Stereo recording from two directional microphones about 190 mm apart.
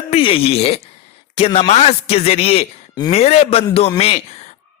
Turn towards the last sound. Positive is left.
turn(degrees=35)  # may be behind; listen again after turning